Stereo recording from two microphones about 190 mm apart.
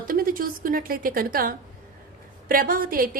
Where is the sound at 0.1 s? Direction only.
45° right (ahead or behind).